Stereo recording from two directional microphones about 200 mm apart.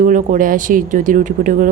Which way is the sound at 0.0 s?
40° right (ahead or behind).